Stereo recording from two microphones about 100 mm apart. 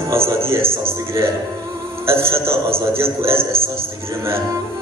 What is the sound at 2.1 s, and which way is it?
A man's voice, 25° right (ahead or behind).